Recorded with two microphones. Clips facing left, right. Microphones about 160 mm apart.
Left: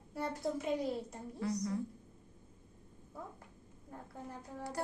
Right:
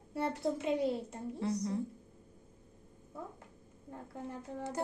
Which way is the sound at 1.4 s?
25° right (ahead or behind).